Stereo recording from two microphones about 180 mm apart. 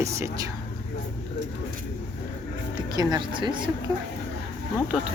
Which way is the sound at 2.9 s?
20° right (ahead or behind).